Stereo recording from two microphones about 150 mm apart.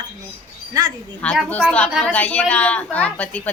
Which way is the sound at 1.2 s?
5° left (ahead or behind).